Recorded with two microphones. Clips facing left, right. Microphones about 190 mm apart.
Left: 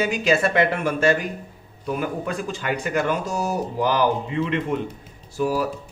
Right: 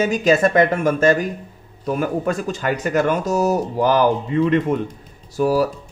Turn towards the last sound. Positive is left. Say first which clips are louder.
# right 5 dB
turn(degrees=-40)  # may be behind; listen again after turning